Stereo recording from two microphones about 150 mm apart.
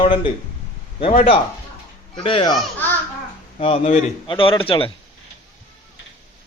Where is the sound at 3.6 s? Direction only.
45° left (ahead or behind).